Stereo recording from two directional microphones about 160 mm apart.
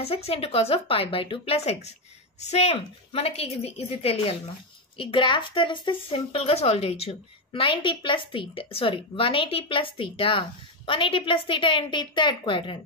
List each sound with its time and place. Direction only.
0.0 s speech: 40° left (ahead or behind)